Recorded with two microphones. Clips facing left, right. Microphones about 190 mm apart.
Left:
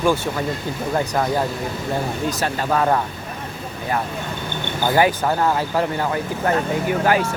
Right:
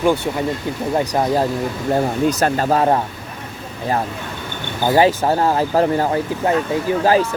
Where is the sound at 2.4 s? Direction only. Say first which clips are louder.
Right 1 dB; 40° right (ahead or behind).